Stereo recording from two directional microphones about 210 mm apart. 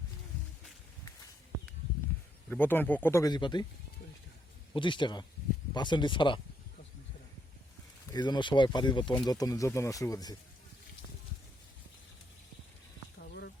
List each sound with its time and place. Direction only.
2.5 s speech: 10° left (ahead or behind)
4.7 s speech: 25° left (ahead or behind)
8.1 s speech: 20° left (ahead or behind)
13.1 s a sound: 50° left (ahead or behind)